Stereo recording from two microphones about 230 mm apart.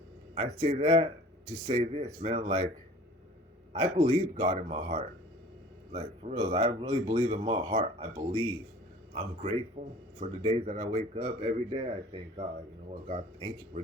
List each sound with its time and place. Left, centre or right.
0.3 s speech: right
3.9 s speech: right